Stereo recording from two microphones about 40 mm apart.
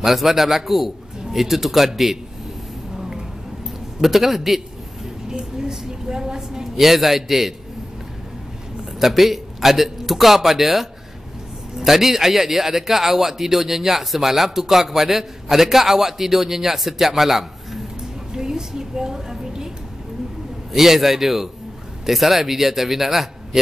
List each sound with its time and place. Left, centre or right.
0.0 s a man's voice: centre
3.0 s a sound: centre
4.0 s a man's voice: centre
9.0 s a man's voice: centre
18.3 s a sound: centre
20.7 s speech: centre